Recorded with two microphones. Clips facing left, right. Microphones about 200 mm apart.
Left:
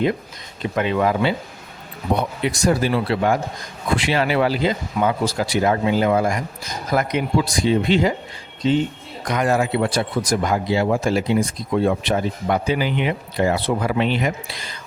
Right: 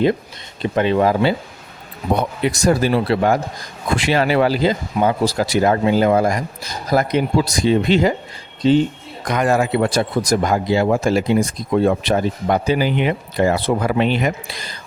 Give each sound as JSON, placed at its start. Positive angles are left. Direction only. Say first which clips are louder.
{"t": 0.6, "sound": "speech", "louder": "right 4 dB", "side_deg": -30}
{"t": 9.3, "sound": "speech", "louder": "right 2 dB", "side_deg": -50}